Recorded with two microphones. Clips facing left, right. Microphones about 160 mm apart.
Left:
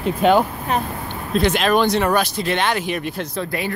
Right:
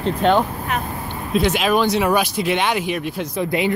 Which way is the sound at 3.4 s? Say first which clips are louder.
Right 9 dB; 20° right (ahead or behind).